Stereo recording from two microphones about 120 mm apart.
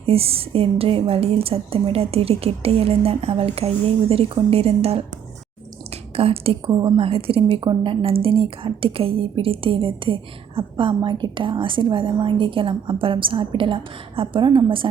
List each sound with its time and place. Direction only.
0.0 s a woman's voice: 55° right (ahead or behind)
6.1 s a woman's voice: 55° right (ahead or behind)
6.7 s a woman's voice: 40° right (ahead or behind)